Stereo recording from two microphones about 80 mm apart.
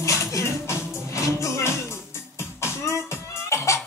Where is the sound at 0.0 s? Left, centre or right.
Left.